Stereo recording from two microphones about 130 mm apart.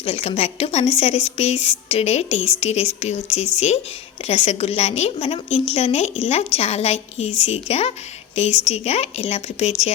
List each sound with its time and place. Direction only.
0.0 s a woman's voice: 50° left (ahead or behind)